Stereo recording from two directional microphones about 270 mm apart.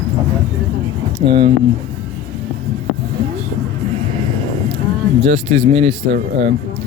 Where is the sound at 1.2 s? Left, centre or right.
Centre.